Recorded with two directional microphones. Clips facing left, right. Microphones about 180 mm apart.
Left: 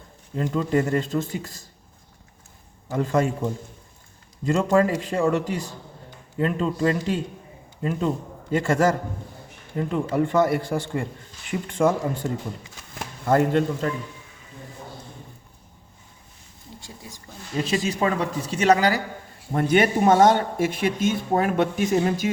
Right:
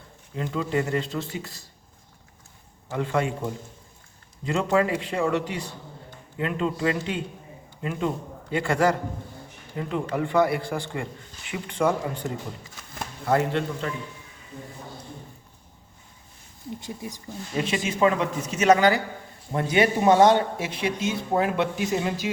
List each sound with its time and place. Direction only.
0.3 s speech: 45° left (ahead or behind)
2.9 s a man's voice: 40° left (ahead or behind)
4.4 s a man's voice: 45° left (ahead or behind)
13.2 s speech: 45° left (ahead or behind)
16.8 s speech: 20° right (ahead or behind)
17.8 s a man's voice: 35° left (ahead or behind)
19.5 s speech: 55° left (ahead or behind)